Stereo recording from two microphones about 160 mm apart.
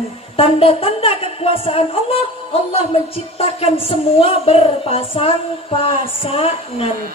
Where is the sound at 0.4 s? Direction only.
35° left (ahead or behind).